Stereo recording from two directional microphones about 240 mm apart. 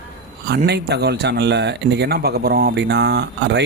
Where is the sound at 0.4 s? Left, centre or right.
Right.